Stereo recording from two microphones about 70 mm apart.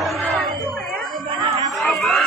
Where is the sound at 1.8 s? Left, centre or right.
Centre.